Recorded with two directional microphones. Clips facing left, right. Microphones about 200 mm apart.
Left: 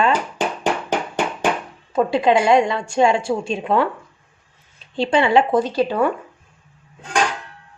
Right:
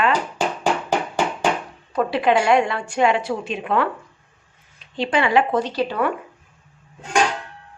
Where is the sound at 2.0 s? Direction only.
25° left (ahead or behind).